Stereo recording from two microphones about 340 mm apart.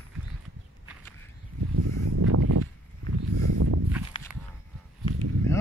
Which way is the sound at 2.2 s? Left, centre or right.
Right.